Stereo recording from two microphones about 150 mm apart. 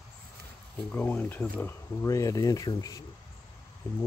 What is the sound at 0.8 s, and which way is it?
Speech, 10° left (ahead or behind).